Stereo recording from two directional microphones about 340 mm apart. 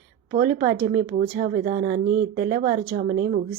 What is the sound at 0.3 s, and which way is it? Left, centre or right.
Speech, centre.